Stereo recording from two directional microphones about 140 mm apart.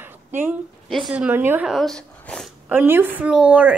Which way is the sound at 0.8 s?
Centre (ahead or behind).